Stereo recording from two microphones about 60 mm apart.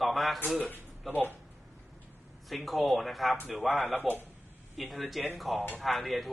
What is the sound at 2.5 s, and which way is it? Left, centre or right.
Speech, centre.